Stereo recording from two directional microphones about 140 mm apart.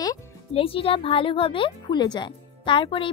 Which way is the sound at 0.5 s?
40° left (ahead or behind).